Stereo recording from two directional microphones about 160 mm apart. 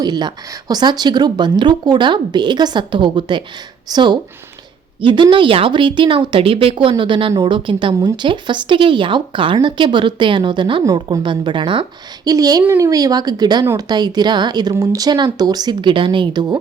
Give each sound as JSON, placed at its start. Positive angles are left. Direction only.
{"t": 0.0, "sound": "a woman's voice", "side_deg": -25}